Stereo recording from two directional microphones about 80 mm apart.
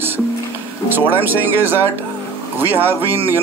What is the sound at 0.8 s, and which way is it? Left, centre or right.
A man's voice, right.